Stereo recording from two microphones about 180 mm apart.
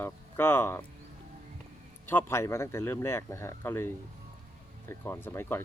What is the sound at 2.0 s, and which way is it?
Speech, 15° left (ahead or behind).